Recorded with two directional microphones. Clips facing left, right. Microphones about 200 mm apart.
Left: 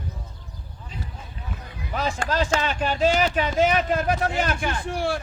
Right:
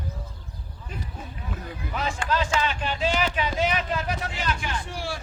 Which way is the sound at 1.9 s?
40° left (ahead or behind).